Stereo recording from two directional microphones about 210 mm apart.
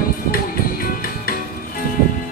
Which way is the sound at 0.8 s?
45° left (ahead or behind).